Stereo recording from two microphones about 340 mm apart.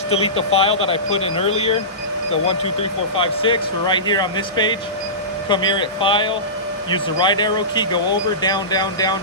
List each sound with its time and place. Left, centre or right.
0.1 s speech: centre
3.2 s speech: centre